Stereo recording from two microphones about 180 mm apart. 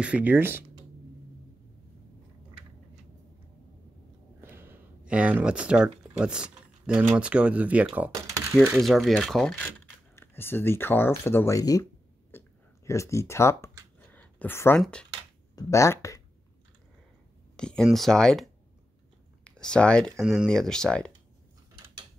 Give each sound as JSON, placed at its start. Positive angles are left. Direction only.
{"t": 0.0, "sound": "speech", "side_deg": -10}
{"t": 4.4, "sound": "speech", "side_deg": -10}
{"t": 12.3, "sound": "a sound", "side_deg": 15}
{"t": 14.8, "sound": "speech", "side_deg": 5}
{"t": 15.5, "sound": "speech", "side_deg": 15}
{"t": 17.6, "sound": "speech", "side_deg": 5}